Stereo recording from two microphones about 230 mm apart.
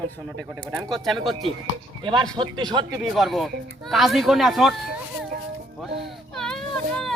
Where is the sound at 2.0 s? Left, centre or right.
Right.